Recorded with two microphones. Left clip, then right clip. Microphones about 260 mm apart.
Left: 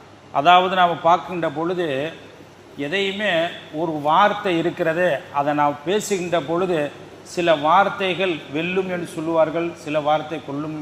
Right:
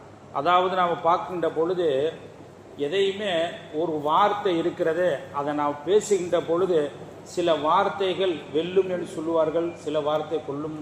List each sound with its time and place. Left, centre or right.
0.3 s a man's voice: left